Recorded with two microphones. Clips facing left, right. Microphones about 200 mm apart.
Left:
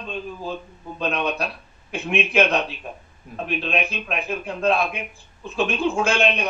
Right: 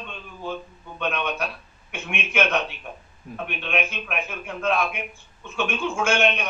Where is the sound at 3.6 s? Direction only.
35° left (ahead or behind).